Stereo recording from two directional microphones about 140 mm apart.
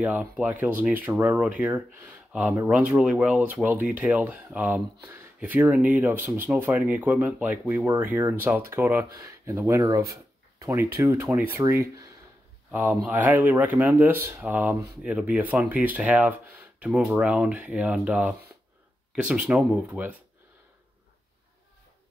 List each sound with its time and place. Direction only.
0.0 s speech: 10° right (ahead or behind)